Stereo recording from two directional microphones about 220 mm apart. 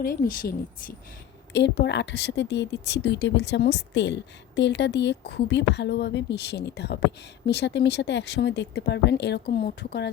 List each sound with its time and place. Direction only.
0.0 s speech: 40° left (ahead or behind)
1.5 s speech: 50° left (ahead or behind)